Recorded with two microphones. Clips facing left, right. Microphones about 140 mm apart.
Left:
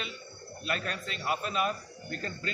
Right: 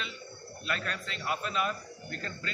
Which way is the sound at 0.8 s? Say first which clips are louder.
Left 1 dB; 40° left (ahead or behind).